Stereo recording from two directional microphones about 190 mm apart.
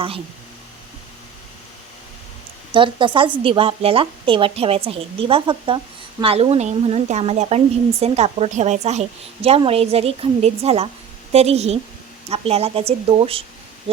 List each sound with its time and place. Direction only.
2.7 s a woman's voice: 25° right (ahead or behind)